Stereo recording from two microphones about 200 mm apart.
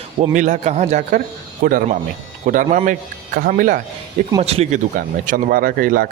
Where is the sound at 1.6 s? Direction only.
45° right (ahead or behind).